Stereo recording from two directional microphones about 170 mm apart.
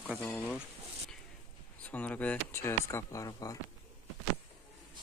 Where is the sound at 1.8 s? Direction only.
10° left (ahead or behind).